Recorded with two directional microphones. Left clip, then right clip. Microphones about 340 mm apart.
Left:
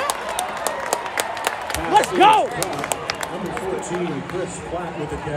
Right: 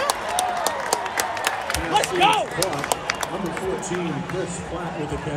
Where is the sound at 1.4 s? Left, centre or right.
Left.